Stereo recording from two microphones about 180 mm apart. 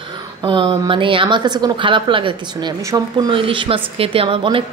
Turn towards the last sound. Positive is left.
turn(degrees=-30)  # may be behind; listen again after turning